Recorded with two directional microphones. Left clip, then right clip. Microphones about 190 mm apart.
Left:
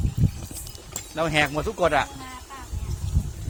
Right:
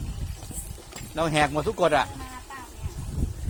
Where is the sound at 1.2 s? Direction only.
25° right (ahead or behind).